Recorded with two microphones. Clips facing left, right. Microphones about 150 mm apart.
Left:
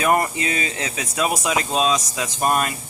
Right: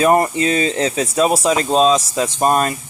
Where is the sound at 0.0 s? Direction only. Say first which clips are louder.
Right 6 dB; 30° right (ahead or behind).